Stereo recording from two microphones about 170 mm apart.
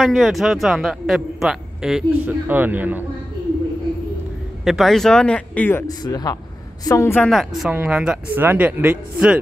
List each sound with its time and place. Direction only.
0.0 s a man's voice: centre (ahead or behind)
4.6 s a man's voice: centre (ahead or behind); by 7.2 s 20° left (ahead or behind)
7.2 s a man's voice: centre (ahead or behind)